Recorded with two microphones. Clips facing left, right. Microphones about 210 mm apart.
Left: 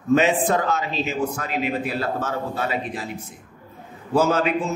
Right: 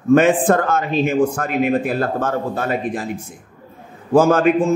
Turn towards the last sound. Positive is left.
turn(degrees=-50)  # may be behind; listen again after turning